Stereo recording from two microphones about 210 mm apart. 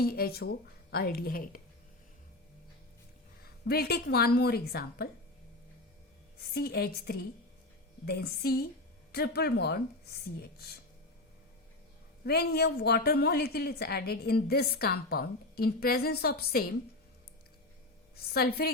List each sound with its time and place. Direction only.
0.0 s a woman's voice: 45° left (ahead or behind)
3.7 s a woman's voice: 50° left (ahead or behind)
6.5 s a woman's voice: 50° left (ahead or behind)
12.2 s a woman's voice: 50° left (ahead or behind)
18.3 s a woman's voice: 50° left (ahead or behind)